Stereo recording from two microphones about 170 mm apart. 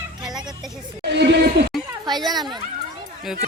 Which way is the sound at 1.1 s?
80° right.